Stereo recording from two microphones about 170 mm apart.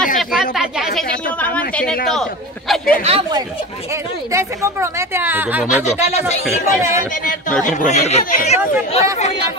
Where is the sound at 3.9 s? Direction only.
15° right (ahead or behind).